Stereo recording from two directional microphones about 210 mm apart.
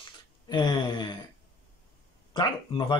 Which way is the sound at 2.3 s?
20° left (ahead or behind).